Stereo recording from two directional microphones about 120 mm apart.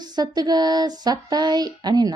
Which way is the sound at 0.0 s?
35° right (ahead or behind).